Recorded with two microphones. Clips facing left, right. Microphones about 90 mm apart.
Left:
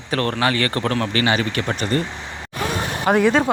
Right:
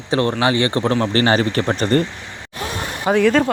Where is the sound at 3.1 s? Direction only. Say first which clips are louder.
Even; 5° right (ahead or behind).